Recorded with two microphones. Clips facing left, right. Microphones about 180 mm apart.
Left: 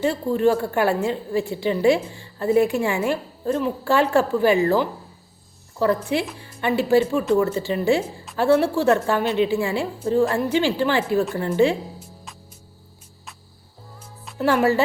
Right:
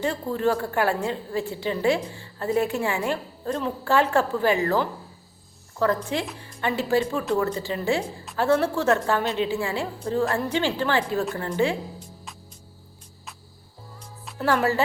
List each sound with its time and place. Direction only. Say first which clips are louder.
0.3 s a woman's voice: left 4 dB; 15° left (ahead or behind)
5.8 s a woman's voice: left 3 dB; 10° left (ahead or behind)
14.3 s a woman's voice: left 4 dB; 15° left (ahead or behind)